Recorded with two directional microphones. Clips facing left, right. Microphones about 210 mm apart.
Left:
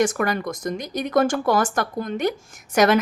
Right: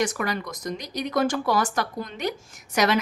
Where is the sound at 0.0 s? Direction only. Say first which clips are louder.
Left 5 dB; 50° left (ahead or behind).